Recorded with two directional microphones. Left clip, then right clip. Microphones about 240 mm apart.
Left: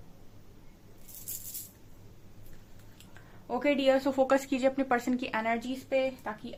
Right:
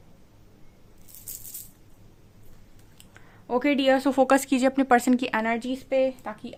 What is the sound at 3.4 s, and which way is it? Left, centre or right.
A woman's voice, right.